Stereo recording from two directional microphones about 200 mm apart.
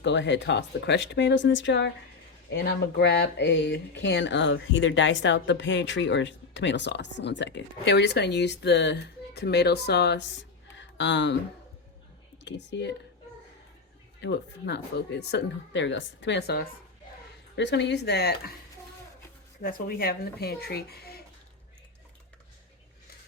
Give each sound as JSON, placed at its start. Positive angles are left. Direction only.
{"t": 0.0, "sound": "speech", "side_deg": 60}
{"t": 10.8, "sound": "a sound", "side_deg": 65}
{"t": 12.5, "sound": "speech", "side_deg": 60}
{"t": 14.2, "sound": "speech", "side_deg": 55}
{"t": 19.6, "sound": "speech", "side_deg": 45}